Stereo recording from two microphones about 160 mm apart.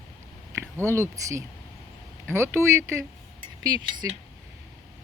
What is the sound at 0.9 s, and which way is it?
Speech, 20° right (ahead or behind).